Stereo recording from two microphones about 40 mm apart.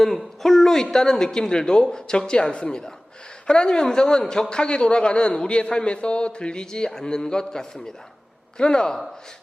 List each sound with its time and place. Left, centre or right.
0.0 s a man's voice: centre